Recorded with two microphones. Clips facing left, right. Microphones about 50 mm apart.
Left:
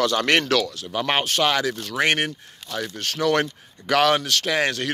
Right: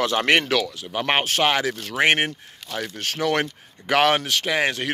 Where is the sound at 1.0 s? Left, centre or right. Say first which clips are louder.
Right 1 dB; right.